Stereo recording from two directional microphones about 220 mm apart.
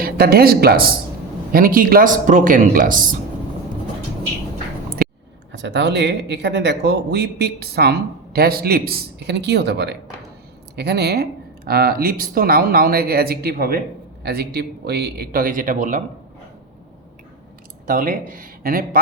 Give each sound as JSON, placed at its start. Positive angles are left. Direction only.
{"t": 0.0, "sound": "speech", "side_deg": -45}
{"t": 5.0, "sound": "a sound", "side_deg": -40}
{"t": 5.5, "sound": "speech", "side_deg": -55}
{"t": 17.8, "sound": "speech", "side_deg": -40}